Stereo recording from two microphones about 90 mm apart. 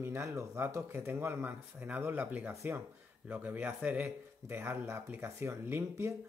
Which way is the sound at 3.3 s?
20° right (ahead or behind).